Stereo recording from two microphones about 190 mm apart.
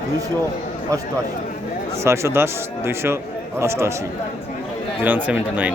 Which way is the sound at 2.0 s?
15° right (ahead or behind).